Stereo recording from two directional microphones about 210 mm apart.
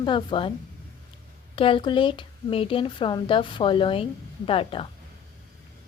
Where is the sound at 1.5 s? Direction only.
25° left (ahead or behind).